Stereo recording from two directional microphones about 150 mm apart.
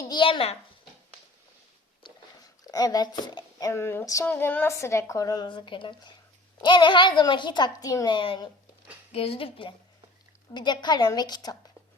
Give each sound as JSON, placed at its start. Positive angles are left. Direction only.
{"t": 0.0, "sound": "a child's voice", "side_deg": 30}
{"t": 2.6, "sound": "a woman's voice", "side_deg": 25}